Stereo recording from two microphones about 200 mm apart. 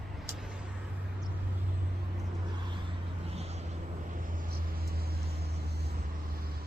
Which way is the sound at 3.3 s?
30° right (ahead or behind).